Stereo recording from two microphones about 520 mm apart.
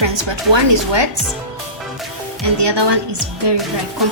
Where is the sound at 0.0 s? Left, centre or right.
Right.